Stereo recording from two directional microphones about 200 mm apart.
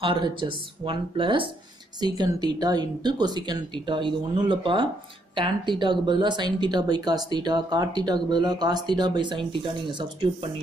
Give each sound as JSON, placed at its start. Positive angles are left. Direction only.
{"t": 0.0, "sound": "speech", "side_deg": -25}